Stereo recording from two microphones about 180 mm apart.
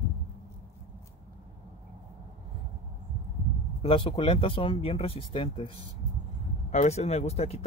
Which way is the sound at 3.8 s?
30° left (ahead or behind).